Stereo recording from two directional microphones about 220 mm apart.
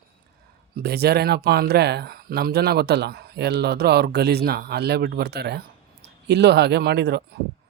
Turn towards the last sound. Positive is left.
turn(degrees=-50)  # may be behind; listen again after turning